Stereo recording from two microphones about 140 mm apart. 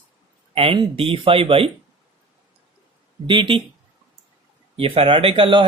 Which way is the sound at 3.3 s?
35° right (ahead or behind).